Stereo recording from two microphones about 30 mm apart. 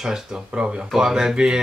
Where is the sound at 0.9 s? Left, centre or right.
Centre.